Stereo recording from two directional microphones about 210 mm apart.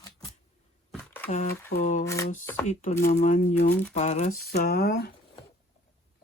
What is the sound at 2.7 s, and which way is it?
Speech, 35° left (ahead or behind).